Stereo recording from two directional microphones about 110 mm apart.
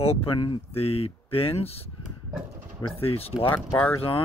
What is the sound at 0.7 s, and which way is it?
Speech, 65° left (ahead or behind).